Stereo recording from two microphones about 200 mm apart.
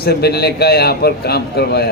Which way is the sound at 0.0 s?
50° left (ahead or behind).